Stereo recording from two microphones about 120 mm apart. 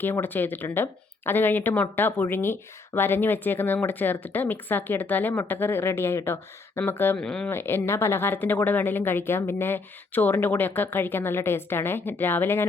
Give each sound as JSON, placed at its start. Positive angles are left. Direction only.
{"t": 0.0, "sound": "speech", "side_deg": 15}
{"t": 7.2, "sound": "speech", "side_deg": 5}
{"t": 7.5, "sound": "speech", "side_deg": 20}